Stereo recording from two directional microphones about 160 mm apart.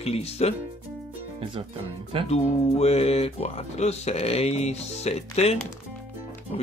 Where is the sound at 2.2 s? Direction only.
40° left (ahead or behind).